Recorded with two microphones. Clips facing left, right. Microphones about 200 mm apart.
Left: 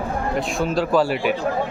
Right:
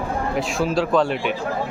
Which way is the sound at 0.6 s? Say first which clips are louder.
Even; centre (ahead or behind).